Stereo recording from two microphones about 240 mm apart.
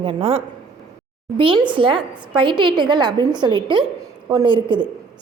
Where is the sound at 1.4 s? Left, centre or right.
Right.